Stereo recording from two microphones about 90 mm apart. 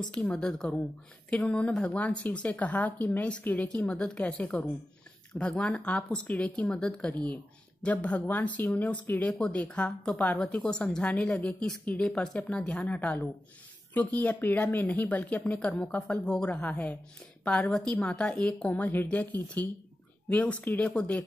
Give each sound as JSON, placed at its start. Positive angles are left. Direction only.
{"t": 0.1, "sound": "a woman's voice", "side_deg": 10}